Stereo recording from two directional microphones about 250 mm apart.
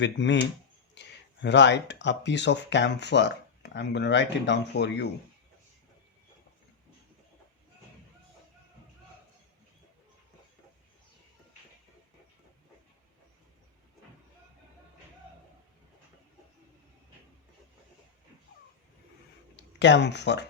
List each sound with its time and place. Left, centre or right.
0.0 s speech: left
19.8 s speech: left